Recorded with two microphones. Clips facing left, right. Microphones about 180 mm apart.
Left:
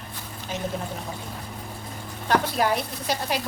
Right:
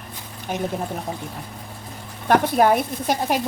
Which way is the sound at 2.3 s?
55° right (ahead or behind).